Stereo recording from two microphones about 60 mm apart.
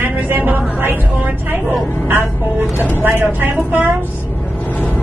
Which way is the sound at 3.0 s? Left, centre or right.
Right.